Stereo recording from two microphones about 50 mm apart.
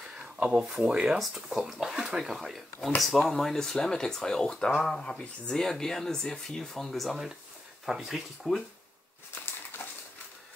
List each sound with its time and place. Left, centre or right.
0.6 s speech: centre
5.0 s speech: centre
9.8 s a sound: left